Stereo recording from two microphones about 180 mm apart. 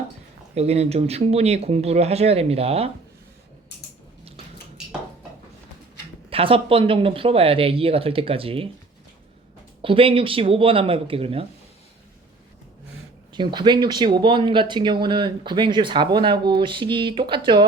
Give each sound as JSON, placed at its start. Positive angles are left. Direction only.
{"t": 0.5, "sound": "speech", "side_deg": -35}
{"t": 6.3, "sound": "speech", "side_deg": -30}
{"t": 9.8, "sound": "speech", "side_deg": -30}
{"t": 13.3, "sound": "speech", "side_deg": -25}